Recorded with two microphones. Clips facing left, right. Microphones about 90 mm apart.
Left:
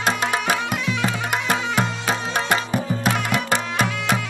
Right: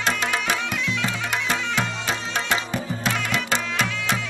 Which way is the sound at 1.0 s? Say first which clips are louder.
Left 3 dB; 50° left (ahead or behind).